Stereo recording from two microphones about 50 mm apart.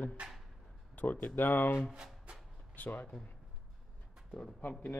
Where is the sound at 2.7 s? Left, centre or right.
Left.